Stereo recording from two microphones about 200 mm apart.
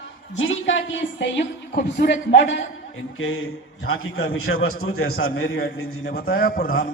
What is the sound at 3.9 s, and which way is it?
Speech, 90° left.